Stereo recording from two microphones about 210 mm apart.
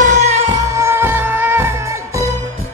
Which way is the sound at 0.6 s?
15° right (ahead or behind).